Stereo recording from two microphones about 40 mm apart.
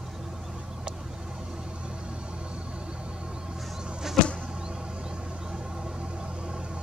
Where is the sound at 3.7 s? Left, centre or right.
Centre.